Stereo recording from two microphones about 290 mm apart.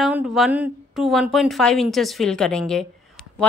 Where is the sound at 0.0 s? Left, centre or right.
Centre.